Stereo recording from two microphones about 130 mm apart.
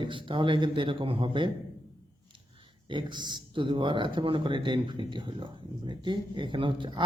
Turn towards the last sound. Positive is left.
turn(degrees=-40)  # may be behind; listen again after turning